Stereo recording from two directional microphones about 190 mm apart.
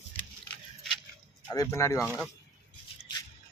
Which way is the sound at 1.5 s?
15° left (ahead or behind).